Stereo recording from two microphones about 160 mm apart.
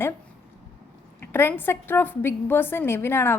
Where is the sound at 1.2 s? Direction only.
15° left (ahead or behind).